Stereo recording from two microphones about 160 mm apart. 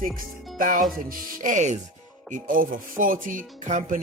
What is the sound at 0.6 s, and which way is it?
Music, 55° right (ahead or behind).